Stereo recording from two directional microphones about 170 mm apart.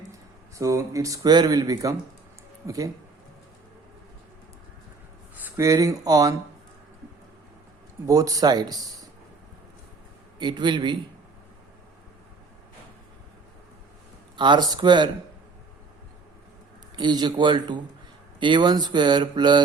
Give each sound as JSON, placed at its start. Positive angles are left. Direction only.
{"t": 0.5, "sound": "speech", "side_deg": -20}
{"t": 5.5, "sound": "speech", "side_deg": -20}
{"t": 8.0, "sound": "speech", "side_deg": -20}
{"t": 10.3, "sound": "speech", "side_deg": -25}
{"t": 14.3, "sound": "speech", "side_deg": -25}
{"t": 16.9, "sound": "speech", "side_deg": -25}